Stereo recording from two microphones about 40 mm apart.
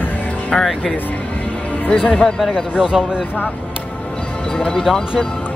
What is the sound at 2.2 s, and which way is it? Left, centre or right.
Speech, centre.